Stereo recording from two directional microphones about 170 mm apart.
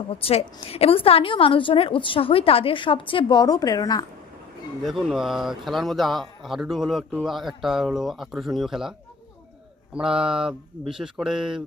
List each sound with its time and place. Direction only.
0.1 s a woman's voice: 35° left (ahead or behind)
4.8 s a man's voice: centre (ahead or behind)